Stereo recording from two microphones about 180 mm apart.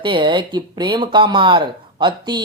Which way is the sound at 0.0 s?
25° right (ahead or behind).